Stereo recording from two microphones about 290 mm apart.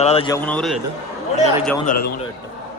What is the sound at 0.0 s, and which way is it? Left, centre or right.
Speech, centre.